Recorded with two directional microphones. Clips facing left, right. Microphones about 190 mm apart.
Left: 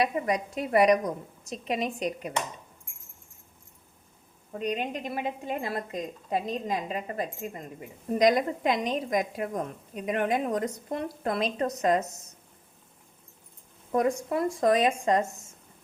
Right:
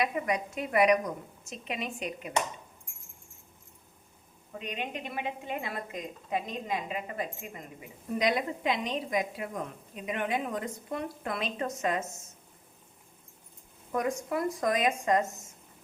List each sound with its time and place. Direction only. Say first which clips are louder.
0.0 s a woman's voice: left 3 dB; 35° left (ahead or behind)
4.5 s a woman's voice: left 6 dB; 40° left (ahead or behind)
13.9 s speech: left 4 dB; 30° left (ahead or behind)